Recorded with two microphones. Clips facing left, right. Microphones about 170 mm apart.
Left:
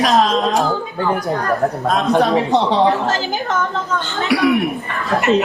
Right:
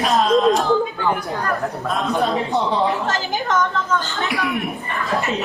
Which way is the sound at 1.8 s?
80° left.